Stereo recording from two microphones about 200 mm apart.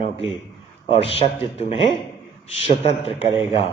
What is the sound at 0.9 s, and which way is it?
Speech, 30° left (ahead or behind).